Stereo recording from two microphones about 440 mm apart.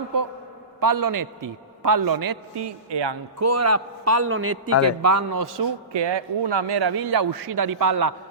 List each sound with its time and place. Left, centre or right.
0.8 s a man's voice: right
3.4 s a man's voice: right
5.9 s a man's voice: right